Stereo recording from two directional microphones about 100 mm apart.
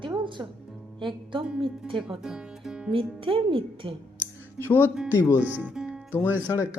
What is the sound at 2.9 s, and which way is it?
Speech, 65° right (ahead or behind).